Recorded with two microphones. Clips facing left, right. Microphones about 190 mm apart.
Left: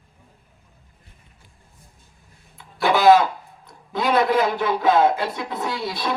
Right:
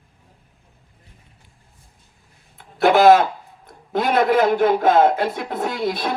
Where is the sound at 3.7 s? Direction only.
50° right (ahead or behind).